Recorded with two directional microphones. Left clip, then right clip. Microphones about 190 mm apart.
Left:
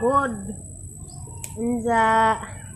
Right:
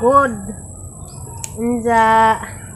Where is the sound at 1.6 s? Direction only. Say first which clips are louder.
Right 6 dB; 10° right (ahead or behind).